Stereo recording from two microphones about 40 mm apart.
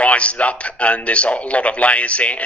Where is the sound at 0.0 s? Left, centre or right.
Left.